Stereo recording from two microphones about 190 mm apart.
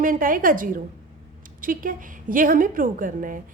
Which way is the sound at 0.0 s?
45° right (ahead or behind).